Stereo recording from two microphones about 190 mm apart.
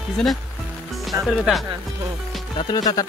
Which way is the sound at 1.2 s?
Centre (ahead or behind).